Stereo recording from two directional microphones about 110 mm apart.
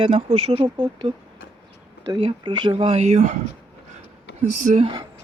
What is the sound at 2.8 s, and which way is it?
Speech, 80° right.